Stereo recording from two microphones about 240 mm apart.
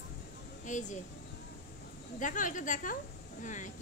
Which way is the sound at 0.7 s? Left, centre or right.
Left.